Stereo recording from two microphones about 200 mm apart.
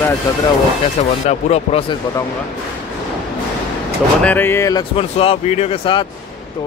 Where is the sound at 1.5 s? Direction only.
30° left (ahead or behind).